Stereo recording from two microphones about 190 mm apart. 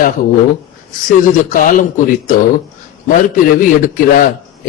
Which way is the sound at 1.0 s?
45° left (ahead or behind).